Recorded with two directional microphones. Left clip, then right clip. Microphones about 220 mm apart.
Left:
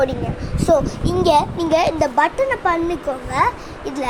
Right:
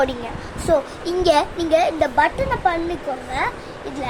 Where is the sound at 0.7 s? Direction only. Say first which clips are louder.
Left 2 dB; 10° left (ahead or behind).